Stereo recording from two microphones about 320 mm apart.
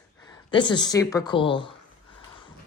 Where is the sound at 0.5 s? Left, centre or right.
Centre.